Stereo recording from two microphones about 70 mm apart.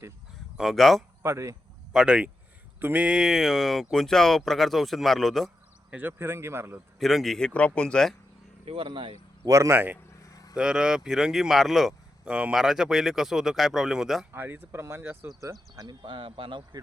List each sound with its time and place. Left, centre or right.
0.5 s speech: centre
1.2 s speech: right
1.9 s speech: centre
3.2 s speech: centre
5.9 s speech: right
6.1 s speech: right
7.0 s speech: centre
9.4 s speech: right
9.7 s speech: right
10.2 s vehicle: left
10.5 s speech: centre
12.2 s speech: centre
14.3 s speech: right
15.7 s speech: right